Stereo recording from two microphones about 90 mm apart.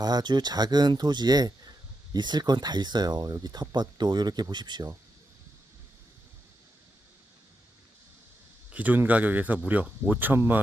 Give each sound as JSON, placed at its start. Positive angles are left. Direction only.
{"t": 0.0, "sound": "speech", "side_deg": -50}
{"t": 8.7, "sound": "speech", "side_deg": -20}